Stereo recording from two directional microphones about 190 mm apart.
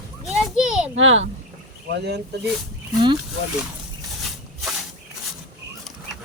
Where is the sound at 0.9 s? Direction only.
90° right.